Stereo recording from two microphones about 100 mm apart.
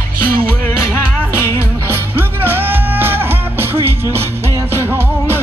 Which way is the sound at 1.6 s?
20° right (ahead or behind).